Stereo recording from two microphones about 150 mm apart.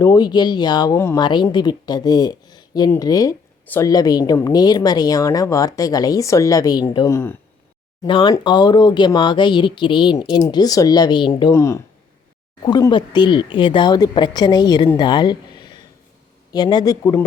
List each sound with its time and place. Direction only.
0.0 s speech: 25° left (ahead or behind)
0.9 s speech: 15° left (ahead or behind)
1.2 s speech: 30° left (ahead or behind)
8.0 s speech: 30° left (ahead or behind)
11.5 s speech: 20° left (ahead or behind)
12.9 s speech: 30° left (ahead or behind)